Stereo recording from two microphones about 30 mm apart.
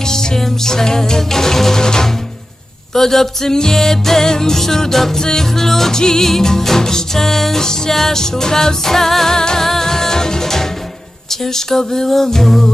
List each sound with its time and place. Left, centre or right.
0.0 s music: centre